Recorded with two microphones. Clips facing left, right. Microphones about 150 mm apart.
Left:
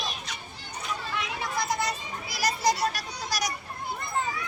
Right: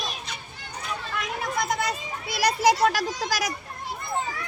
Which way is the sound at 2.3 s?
75° right (ahead or behind).